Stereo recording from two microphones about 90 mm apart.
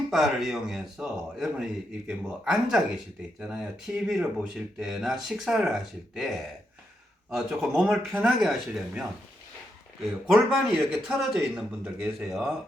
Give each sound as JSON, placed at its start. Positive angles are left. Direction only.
{"t": 0.1, "sound": "speech", "side_deg": -5}
{"t": 10.2, "sound": "speech", "side_deg": -5}